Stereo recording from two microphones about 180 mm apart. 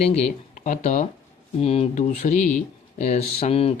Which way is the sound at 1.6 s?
35° left (ahead or behind).